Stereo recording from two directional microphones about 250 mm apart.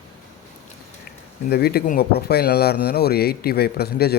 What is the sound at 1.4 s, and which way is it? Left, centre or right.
Speech, left.